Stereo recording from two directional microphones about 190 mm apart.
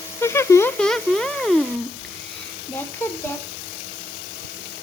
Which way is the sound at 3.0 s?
10° left (ahead or behind).